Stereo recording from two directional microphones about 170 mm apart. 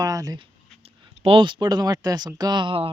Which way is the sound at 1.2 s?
30° right (ahead or behind).